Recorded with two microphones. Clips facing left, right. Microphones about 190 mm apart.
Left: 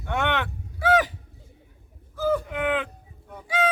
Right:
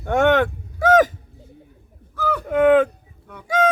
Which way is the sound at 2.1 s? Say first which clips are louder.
Left 1 dB; 70° right (ahead or behind).